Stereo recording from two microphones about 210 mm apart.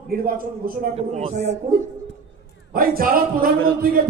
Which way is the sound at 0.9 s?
30° right (ahead or behind).